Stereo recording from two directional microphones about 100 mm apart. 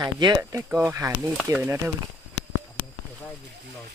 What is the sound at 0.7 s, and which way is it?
Speech, 25° right (ahead or behind).